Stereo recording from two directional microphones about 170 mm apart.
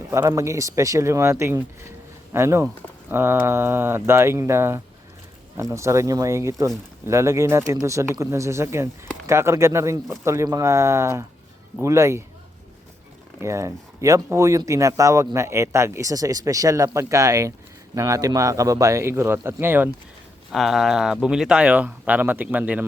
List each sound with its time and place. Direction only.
0.1 s speech: 15° right (ahead or behind)
13.4 s speech: 15° right (ahead or behind)
20.5 s speech: centre (ahead or behind)